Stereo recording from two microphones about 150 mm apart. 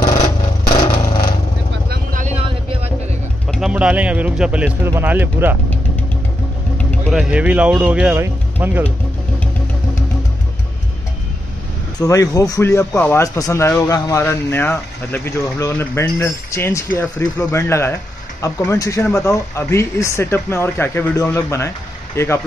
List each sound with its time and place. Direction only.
0.0 s a sound: 25° left (ahead or behind)
2.2 s vehicle: 40° right (ahead or behind)
3.4 s pigeon: centre (ahead or behind)
3.7 s a man's voice: 10° right (ahead or behind)
7.1 s a man's voice: 5° right (ahead or behind)
12.0 s speech: 20° left (ahead or behind)